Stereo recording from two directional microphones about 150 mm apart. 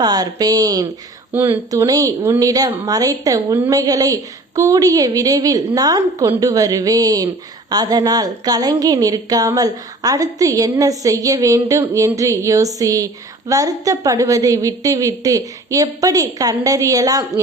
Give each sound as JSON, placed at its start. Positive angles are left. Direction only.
{"t": 0.0, "sound": "a woman's voice", "side_deg": -25}